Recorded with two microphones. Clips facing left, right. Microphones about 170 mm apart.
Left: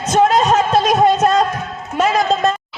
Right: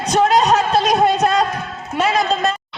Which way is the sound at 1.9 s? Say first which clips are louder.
Left 2 dB; 45° left (ahead or behind).